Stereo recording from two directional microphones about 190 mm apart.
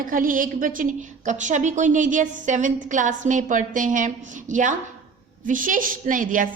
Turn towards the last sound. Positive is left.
turn(degrees=-45)  # may be behind; listen again after turning